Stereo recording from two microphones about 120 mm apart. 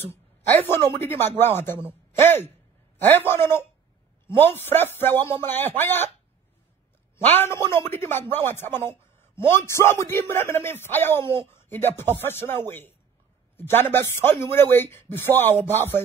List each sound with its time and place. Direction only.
0.0 s a man's voice: 20° left (ahead or behind)
7.3 s a man's voice: 20° left (ahead or behind)